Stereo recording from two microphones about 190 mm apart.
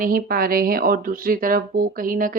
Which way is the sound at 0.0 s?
50° right (ahead or behind).